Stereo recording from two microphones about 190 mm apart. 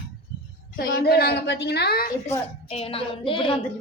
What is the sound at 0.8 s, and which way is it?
A woman's voice, 55° left (ahead or behind).